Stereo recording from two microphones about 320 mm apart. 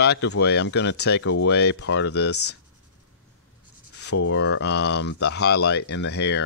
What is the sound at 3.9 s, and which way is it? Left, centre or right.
Writing, left.